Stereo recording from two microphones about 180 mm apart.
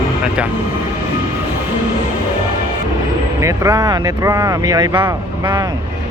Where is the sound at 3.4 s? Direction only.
15° right (ahead or behind).